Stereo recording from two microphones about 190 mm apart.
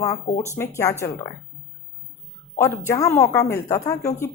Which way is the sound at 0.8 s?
15° left (ahead or behind).